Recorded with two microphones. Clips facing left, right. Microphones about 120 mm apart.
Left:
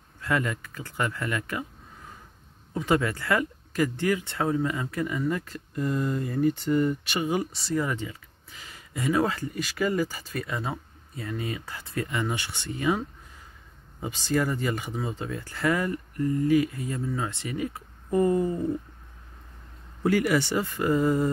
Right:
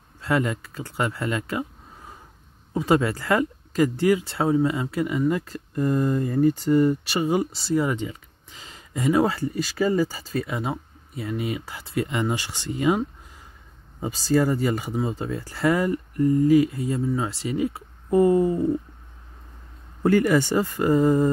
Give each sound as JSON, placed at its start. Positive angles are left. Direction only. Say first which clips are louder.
{"t": 0.2, "sound": "speech", "louder": "right 4 dB", "side_deg": -25}
{"t": 2.7, "sound": "speech", "louder": "right 4 dB", "side_deg": -25}
{"t": 5.4, "sound": "speech", "louder": "right 5 dB", "side_deg": -40}
{"t": 14.0, "sound": "speech", "louder": "right 5 dB", "side_deg": -35}
{"t": 20.0, "sound": "speech", "louder": "right 4 dB", "side_deg": -45}